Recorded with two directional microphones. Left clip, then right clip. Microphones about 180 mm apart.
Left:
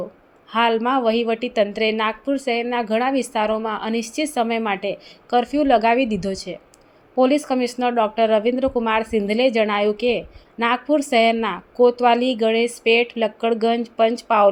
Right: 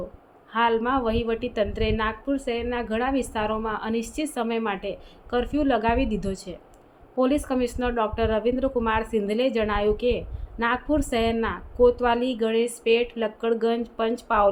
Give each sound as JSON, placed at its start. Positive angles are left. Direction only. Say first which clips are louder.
{"t": 0.5, "sound": "a woman's voice", "louder": "left 4 dB", "side_deg": 25}